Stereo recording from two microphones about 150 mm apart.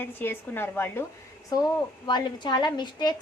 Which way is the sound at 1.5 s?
25° left (ahead or behind).